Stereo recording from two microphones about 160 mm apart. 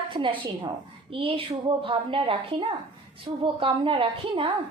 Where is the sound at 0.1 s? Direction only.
30° right (ahead or behind).